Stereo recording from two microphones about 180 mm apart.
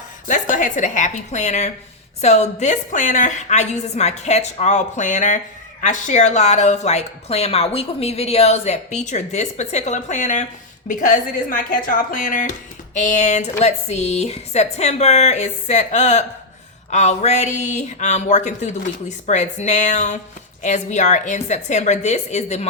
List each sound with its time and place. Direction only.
0.3 s a woman's voice: 45° left (ahead or behind)